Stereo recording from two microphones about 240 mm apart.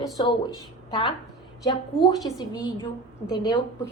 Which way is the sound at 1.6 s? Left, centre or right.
Centre.